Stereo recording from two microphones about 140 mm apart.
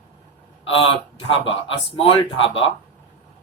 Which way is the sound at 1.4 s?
40° left (ahead or behind).